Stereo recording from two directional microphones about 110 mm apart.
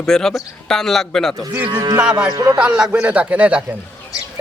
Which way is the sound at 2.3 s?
40° right (ahead or behind).